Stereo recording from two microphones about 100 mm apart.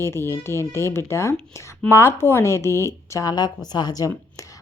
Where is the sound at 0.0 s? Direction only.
25° left (ahead or behind).